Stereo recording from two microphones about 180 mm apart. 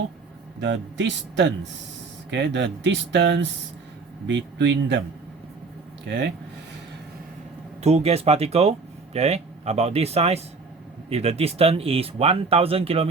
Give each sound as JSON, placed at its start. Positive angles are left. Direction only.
{"t": 0.6, "sound": "speech", "side_deg": -80}
{"t": 6.1, "sound": "speech", "side_deg": -75}
{"t": 7.8, "sound": "speech", "side_deg": -35}